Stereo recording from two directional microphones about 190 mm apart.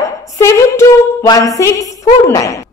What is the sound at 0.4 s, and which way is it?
A woman's voice, 15° left (ahead or behind).